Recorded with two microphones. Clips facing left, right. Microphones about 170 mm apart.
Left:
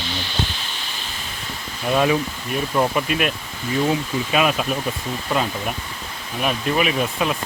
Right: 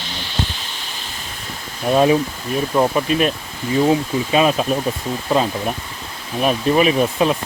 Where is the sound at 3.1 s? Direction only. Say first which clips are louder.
Right 4 dB; 35° right (ahead or behind).